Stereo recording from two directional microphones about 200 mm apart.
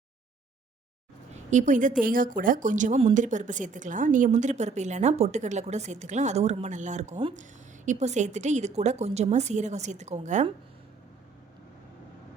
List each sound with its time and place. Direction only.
1.3 s speech: 35° right (ahead or behind)